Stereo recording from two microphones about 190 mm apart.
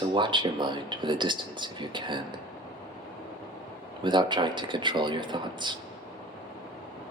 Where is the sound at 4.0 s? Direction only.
25° right (ahead or behind).